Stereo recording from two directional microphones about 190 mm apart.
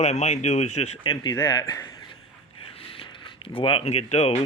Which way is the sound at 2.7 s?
30° left (ahead or behind).